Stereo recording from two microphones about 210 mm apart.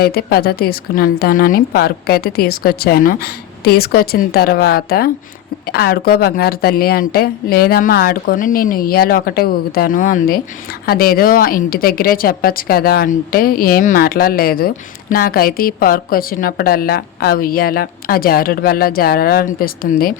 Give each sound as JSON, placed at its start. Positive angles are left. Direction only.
{"t": 0.0, "sound": "speech", "side_deg": 45}